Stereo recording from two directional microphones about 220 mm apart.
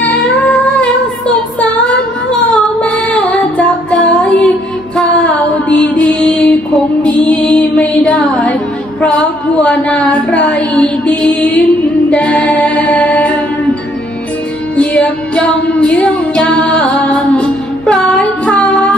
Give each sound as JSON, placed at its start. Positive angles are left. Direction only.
{"t": 0.0, "sound": "humming", "side_deg": 0}
{"t": 2.5, "sound": "music", "side_deg": 5}
{"t": 9.0, "sound": "a woman's voice", "side_deg": 5}
{"t": 14.8, "sound": "music", "side_deg": 5}